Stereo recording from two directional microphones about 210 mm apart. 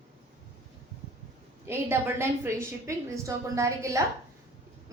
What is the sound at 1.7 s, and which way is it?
A woman's voice, 10° right (ahead or behind).